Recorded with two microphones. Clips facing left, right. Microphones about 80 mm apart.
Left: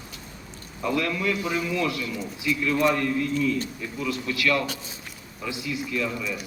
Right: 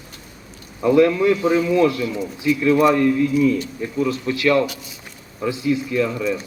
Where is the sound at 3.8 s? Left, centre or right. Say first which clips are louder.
Right 8 dB; right.